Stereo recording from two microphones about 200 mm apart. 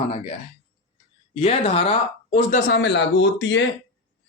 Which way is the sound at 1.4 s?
30° left (ahead or behind).